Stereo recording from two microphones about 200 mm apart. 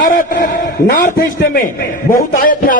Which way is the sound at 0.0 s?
40° left (ahead or behind).